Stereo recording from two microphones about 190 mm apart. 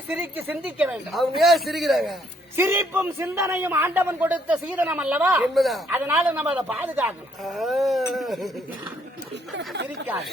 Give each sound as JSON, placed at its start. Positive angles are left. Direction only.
{"t": 0.2, "sound": "a man's voice", "side_deg": -10}
{"t": 2.6, "sound": "a man's voice", "side_deg": -10}
{"t": 9.3, "sound": "speech", "side_deg": -65}